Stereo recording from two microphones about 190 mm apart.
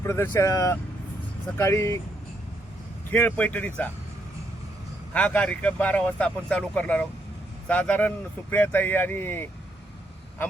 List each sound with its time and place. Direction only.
0.0 s speech: 10° left (ahead or behind)
3.1 s speech: 10° left (ahead or behind)
5.1 s speech: 5° left (ahead or behind)